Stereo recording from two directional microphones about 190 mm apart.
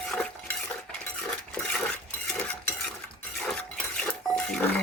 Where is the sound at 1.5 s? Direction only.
5° left (ahead or behind).